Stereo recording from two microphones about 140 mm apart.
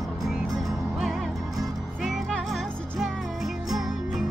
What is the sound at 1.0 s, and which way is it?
Music, centre (ahead or behind).